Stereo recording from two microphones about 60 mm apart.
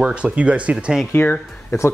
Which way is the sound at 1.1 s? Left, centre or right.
Left.